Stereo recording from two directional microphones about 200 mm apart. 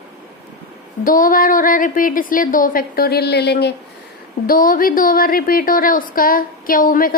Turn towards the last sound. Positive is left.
turn(degrees=45)  # may be behind; listen again after turning